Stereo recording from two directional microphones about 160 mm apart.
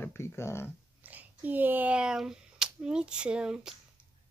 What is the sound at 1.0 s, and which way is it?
Speech, 10° right (ahead or behind).